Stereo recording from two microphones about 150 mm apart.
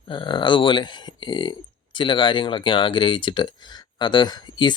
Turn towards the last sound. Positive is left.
turn(degrees=30)  # may be behind; listen again after turning